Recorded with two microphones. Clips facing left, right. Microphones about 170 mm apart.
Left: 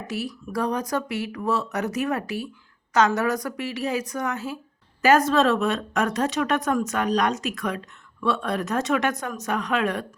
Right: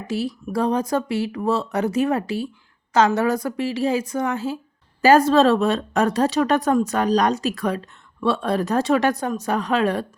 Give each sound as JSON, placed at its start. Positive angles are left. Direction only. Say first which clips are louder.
{"t": 0.1, "sound": "speech", "louder": "right 6 dB", "side_deg": -30}